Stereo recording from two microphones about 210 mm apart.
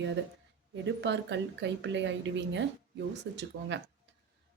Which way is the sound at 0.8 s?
60° right (ahead or behind).